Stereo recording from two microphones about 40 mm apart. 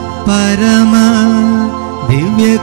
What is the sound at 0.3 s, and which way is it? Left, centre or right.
Music, centre.